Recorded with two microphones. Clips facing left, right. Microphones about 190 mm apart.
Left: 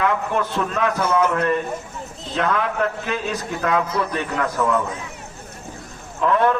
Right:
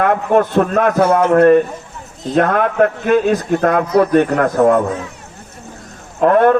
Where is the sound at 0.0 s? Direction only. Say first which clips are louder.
Right 8 dB; 55° right (ahead or behind).